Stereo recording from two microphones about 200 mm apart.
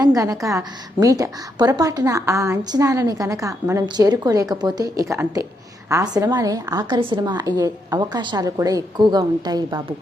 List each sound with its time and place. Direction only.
0.0 s a woman's voice: 20° right (ahead or behind)